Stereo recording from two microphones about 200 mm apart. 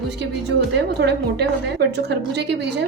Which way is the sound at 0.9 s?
55° right (ahead or behind).